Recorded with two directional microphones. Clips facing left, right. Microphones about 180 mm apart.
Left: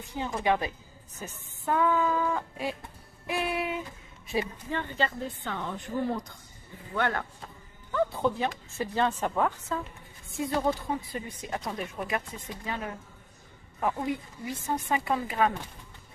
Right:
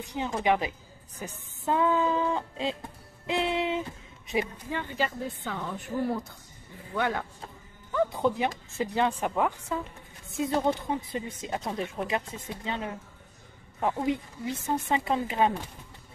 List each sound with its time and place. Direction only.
0.0 s a woman's voice: 20° right (ahead or behind)
3.3 s a sound: 25° right (ahead or behind)
4.3 s a woman's voice: 15° right (ahead or behind)